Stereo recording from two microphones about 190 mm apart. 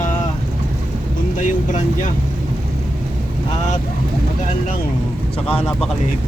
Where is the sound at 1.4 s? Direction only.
40° left (ahead or behind).